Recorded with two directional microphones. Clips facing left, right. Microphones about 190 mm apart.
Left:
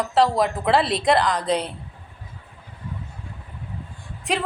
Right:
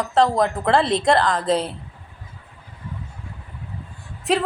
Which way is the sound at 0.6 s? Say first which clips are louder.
Right 2 dB; 5° left (ahead or behind).